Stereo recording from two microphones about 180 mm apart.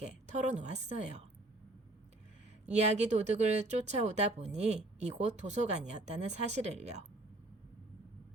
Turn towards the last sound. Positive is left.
turn(degrees=-40)  # may be behind; listen again after turning